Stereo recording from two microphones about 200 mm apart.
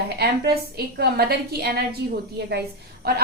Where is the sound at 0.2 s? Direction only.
50° right (ahead or behind).